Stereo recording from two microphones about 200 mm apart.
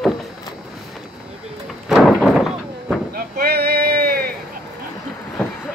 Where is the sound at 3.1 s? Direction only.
50° right (ahead or behind).